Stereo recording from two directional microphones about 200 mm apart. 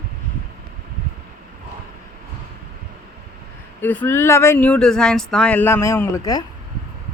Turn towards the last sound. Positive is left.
turn(degrees=15)  # may be behind; listen again after turning